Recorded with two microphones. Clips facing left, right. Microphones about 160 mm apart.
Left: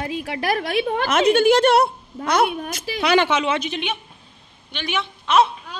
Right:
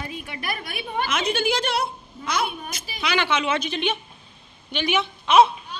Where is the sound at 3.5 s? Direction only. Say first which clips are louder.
Left 1 dB; 20° left (ahead or behind).